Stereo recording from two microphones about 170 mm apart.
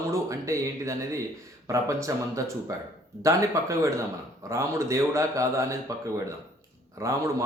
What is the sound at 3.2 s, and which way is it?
A man's voice, 20° right (ahead or behind).